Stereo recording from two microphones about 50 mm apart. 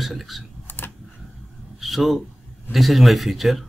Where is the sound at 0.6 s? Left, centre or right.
Left.